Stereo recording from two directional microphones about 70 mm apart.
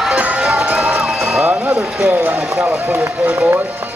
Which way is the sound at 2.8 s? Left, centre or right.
Right.